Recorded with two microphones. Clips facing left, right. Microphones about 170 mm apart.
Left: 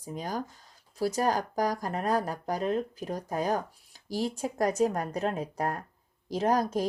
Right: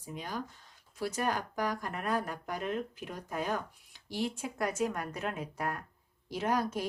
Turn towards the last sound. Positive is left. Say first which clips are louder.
# left 5 dB
turn(degrees=40)  # may be behind; listen again after turning